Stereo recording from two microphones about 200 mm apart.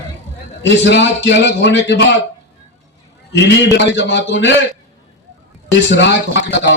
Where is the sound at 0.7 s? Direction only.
65° left (ahead or behind).